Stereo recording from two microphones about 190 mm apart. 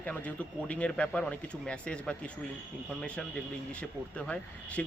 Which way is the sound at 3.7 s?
5° left (ahead or behind).